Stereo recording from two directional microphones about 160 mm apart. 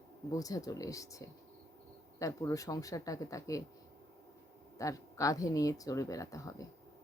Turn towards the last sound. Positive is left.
turn(degrees=20)  # may be behind; listen again after turning